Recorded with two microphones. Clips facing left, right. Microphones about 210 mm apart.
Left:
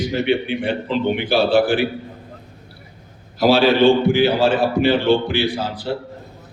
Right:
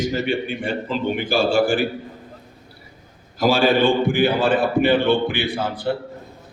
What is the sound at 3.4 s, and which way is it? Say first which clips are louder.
A man's voice: left 3 dB; 50° right (ahead or behind).